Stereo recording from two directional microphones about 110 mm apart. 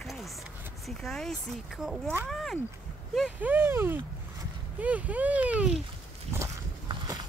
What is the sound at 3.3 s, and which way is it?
Speech, 15° right (ahead or behind).